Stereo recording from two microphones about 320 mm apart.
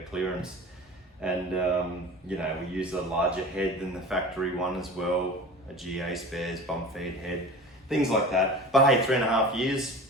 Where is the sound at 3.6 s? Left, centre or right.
Centre.